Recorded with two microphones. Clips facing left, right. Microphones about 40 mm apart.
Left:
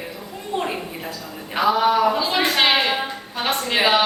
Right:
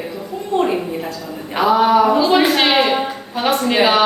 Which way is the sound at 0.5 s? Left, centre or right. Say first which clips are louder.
Right 8 dB; centre.